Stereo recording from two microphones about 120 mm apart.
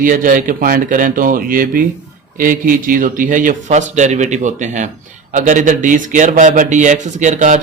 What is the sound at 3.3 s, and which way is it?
A man's voice, 90° right.